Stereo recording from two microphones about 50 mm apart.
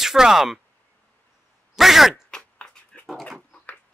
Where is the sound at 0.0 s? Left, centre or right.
Centre.